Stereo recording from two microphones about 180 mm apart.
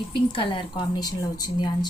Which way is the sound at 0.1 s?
30° left (ahead or behind).